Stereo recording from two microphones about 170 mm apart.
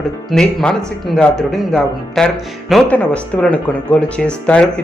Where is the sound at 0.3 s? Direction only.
5° left (ahead or behind).